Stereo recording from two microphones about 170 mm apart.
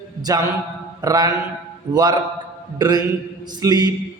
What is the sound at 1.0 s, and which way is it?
Mantra, 20° right (ahead or behind).